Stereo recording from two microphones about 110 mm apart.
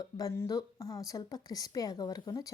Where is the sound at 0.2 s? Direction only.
30° left (ahead or behind).